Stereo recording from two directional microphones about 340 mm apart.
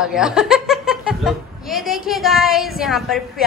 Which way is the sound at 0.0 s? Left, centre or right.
Centre.